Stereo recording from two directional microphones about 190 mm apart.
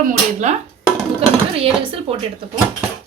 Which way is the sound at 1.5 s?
30° right (ahead or behind).